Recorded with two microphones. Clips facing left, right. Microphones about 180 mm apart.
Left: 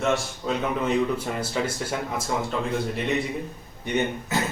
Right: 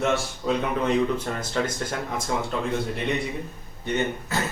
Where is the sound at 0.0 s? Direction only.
Centre (ahead or behind).